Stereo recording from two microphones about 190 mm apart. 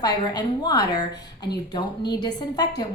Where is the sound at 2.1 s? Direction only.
20° left (ahead or behind).